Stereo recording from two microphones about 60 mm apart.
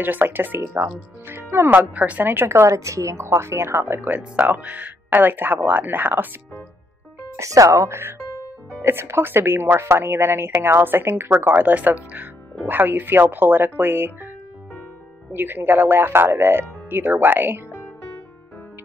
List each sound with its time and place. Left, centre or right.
0.0 s speech: right
1.8 s speech: right
2.3 s speech: right
4.6 s speech: right
7.3 s speech: right
15.3 s speech: right